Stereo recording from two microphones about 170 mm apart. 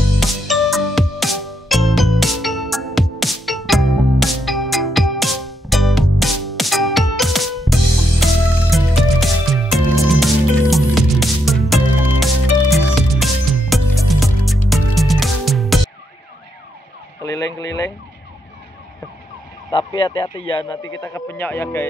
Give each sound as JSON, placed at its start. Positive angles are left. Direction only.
{"t": 0.2, "sound": "music", "side_deg": 0}
{"t": 17.2, "sound": "ambulance", "side_deg": 20}
{"t": 17.6, "sound": "a sound", "side_deg": 20}
{"t": 19.7, "sound": "speech", "side_deg": 30}